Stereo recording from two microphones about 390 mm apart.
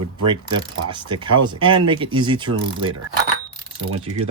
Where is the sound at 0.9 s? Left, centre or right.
Centre.